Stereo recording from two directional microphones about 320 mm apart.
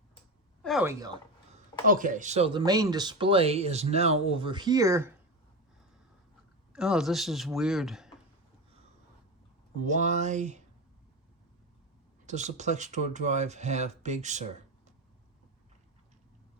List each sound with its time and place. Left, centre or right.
0.6 s a sound: centre
1.9 s speech: right; by 5.1 s centre
6.7 s speech: centre
9.8 s speech: right
12.2 s speech: right